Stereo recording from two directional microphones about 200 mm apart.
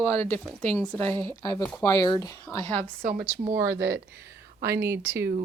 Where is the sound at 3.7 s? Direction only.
55° right (ahead or behind).